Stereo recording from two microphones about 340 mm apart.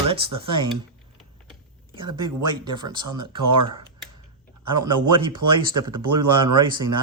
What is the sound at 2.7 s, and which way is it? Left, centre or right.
Speech, centre.